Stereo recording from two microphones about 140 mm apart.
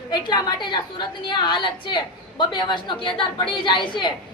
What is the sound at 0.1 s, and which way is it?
A woman's voice, 30° left (ahead or behind).